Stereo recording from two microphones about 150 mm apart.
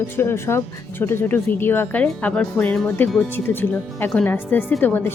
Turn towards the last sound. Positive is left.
turn(degrees=15)  # may be behind; listen again after turning